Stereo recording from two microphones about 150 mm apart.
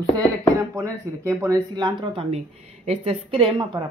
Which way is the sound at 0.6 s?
20° right (ahead or behind).